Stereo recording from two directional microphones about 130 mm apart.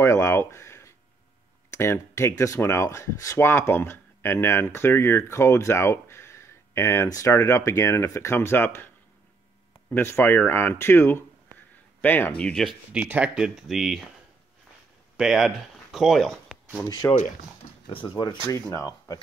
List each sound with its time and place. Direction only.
0.0 s a sound: 20° left (ahead or behind)
1.7 s speech: 20° left (ahead or behind)
12.9 s speech: 10° right (ahead or behind)
15.1 s speech: 5° right (ahead or behind)
17.0 s speech: 20° left (ahead or behind)
17.8 s speech: 35° left (ahead or behind)